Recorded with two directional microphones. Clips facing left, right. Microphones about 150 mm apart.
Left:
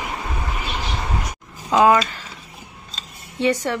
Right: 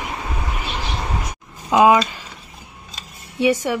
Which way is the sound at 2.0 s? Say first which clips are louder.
Even; 15° right (ahead or behind).